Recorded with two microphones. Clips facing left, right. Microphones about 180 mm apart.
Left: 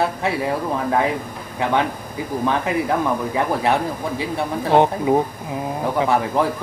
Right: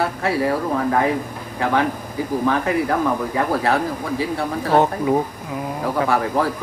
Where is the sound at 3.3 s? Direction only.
20° left (ahead or behind).